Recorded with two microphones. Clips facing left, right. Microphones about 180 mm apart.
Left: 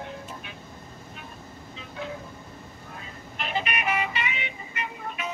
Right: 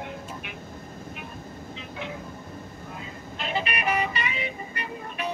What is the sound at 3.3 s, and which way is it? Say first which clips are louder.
Vehicle: even; 30° right (ahead or behind).